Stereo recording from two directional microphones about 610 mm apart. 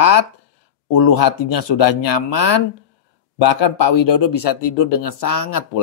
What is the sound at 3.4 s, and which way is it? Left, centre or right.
Speech, left.